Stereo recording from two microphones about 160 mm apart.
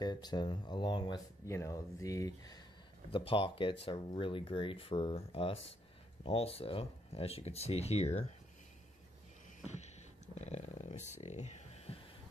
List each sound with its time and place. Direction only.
0.0 s speech: 25° left (ahead or behind)
3.1 s speech: 35° left (ahead or behind)
9.7 s a sound: 45° left (ahead or behind)